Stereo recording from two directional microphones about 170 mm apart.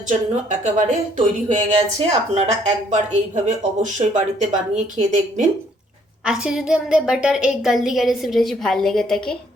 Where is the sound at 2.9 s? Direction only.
45° right (ahead or behind).